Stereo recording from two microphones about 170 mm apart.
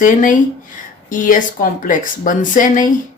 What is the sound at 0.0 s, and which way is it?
Speech, 50° left (ahead or behind).